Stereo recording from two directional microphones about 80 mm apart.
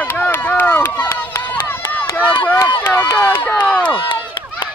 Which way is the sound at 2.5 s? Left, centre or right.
Left.